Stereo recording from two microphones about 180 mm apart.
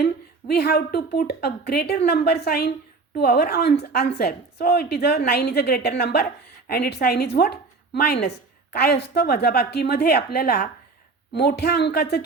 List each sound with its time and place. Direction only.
0.0 s a woman's voice: 65° left (ahead or behind)